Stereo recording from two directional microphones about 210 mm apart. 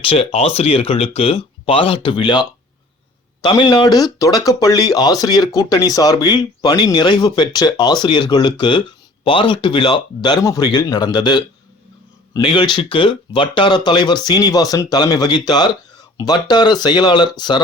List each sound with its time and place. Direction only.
0.0 s speech: 25° left (ahead or behind)